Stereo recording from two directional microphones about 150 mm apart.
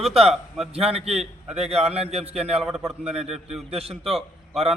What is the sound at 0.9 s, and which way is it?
A man's voice, 45° right (ahead or behind).